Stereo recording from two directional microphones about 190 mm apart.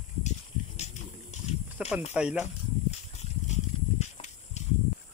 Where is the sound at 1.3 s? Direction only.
40° left (ahead or behind).